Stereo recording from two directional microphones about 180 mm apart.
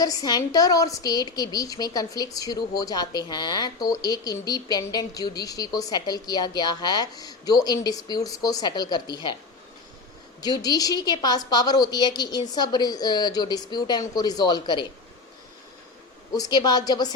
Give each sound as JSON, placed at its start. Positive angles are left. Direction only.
{"t": 0.0, "sound": "a woman's voice", "side_deg": 20}
{"t": 10.4, "sound": "a woman's voice", "side_deg": 20}
{"t": 16.3, "sound": "a woman's voice", "side_deg": 20}